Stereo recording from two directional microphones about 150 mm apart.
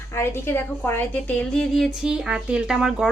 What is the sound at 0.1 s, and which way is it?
A woman's voice, 15° left (ahead or behind).